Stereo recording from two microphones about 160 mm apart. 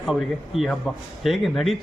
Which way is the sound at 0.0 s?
Centre (ahead or behind).